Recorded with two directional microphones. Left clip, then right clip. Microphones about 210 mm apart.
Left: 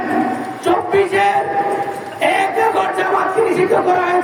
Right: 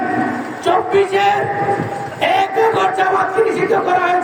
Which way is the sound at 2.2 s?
Centre (ahead or behind).